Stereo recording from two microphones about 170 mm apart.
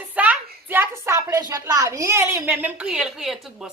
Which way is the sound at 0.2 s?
10° right (ahead or behind).